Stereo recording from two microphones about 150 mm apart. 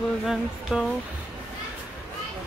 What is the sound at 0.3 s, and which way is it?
Speech, centre (ahead or behind).